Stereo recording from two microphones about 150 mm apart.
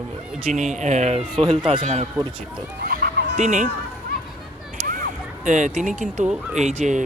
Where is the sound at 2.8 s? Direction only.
75° right (ahead or behind).